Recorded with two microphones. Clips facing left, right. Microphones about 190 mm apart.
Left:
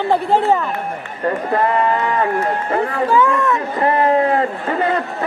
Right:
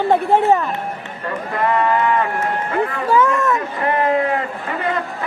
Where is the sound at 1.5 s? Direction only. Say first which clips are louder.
Right 1 dB; 35° left (ahead or behind).